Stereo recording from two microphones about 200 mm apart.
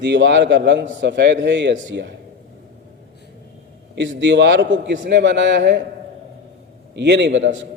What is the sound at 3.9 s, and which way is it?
A man's voice, 60° right (ahead or behind).